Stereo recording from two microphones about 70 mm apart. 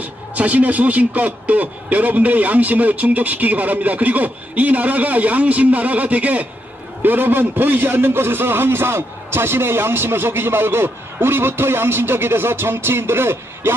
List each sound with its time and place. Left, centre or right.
0.0 s a man's voice: right